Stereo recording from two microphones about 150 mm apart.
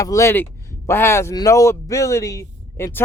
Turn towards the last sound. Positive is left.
turn(degrees=20)  # may be behind; listen again after turning